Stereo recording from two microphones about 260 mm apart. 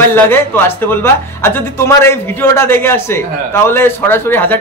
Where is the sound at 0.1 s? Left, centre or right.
Centre.